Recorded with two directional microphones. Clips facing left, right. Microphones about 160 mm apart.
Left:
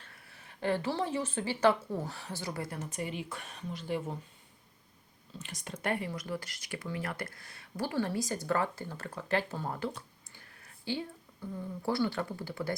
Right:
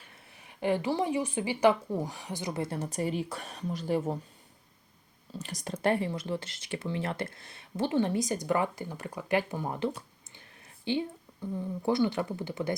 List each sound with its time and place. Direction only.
0.0 s speech: 15° right (ahead or behind); by 4.2 s 40° right (ahead or behind)
5.4 s speech: 40° right (ahead or behind); by 9.9 s 20° right (ahead or behind)
10.3 s a sound: 20° right (ahead or behind)
11.8 s speech: 20° right (ahead or behind)